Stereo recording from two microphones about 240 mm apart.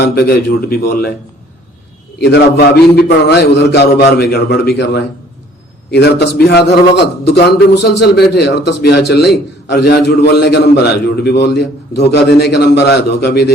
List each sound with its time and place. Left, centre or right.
0.0 s a man's voice: left
2.1 s a man's voice: left